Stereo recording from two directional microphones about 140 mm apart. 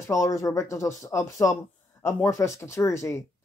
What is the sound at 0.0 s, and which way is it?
Speech, 20° left (ahead or behind).